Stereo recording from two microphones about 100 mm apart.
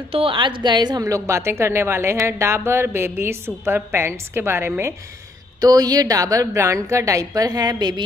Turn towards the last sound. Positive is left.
turn(degrees=-45)  # may be behind; listen again after turning